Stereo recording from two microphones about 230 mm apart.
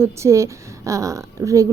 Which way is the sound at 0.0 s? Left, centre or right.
Centre.